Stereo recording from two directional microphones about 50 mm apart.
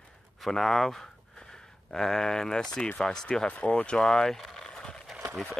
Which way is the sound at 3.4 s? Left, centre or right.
Left.